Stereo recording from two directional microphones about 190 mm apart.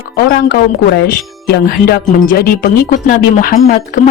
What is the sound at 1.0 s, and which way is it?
Speech, 55° left (ahead or behind).